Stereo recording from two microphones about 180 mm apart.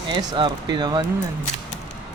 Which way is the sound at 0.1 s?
25° right (ahead or behind).